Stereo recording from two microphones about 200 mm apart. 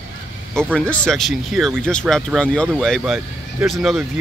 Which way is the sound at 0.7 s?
5° left (ahead or behind).